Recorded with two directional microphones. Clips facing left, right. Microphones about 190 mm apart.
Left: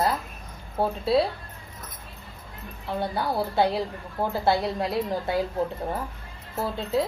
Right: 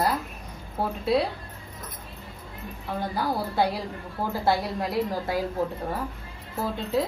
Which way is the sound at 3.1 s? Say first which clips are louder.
Left 1 dB; 25° left (ahead or behind).